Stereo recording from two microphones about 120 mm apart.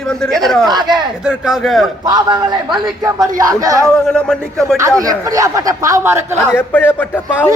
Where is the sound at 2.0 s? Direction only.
35° right (ahead or behind).